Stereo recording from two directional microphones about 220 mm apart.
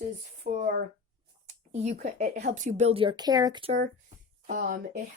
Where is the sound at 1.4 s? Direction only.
30° right (ahead or behind).